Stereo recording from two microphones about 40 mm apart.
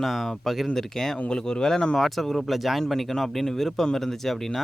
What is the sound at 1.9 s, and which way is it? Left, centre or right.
Speech, centre.